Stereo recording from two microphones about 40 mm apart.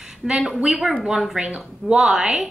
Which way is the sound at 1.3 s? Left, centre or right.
Right.